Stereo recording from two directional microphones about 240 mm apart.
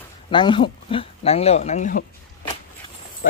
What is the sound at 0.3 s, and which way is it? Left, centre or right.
Speech, centre.